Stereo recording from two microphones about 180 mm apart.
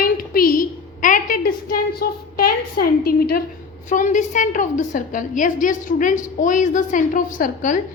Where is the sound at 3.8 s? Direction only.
45° left (ahead or behind).